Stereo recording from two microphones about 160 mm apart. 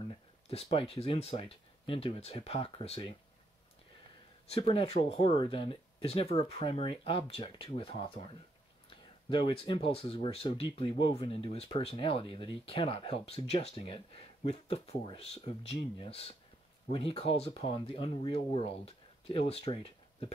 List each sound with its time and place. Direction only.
0.0 s speech: 35° left (ahead or behind)
4.6 s speech: 35° left (ahead or behind)